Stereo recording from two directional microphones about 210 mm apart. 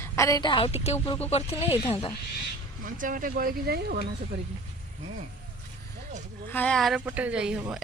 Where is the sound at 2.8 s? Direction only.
40° right (ahead or behind).